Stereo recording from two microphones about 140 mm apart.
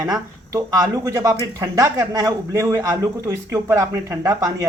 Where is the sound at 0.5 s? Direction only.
25° right (ahead or behind).